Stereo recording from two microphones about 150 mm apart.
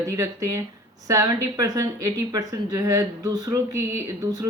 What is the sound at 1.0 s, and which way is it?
Speech, 20° right (ahead or behind).